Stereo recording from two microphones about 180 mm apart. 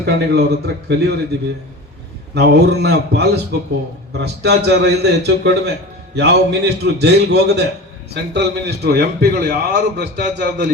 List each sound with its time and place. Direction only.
0.0 s a man's voice: 65° right (ahead or behind)
2.3 s a man's voice: 65° right (ahead or behind)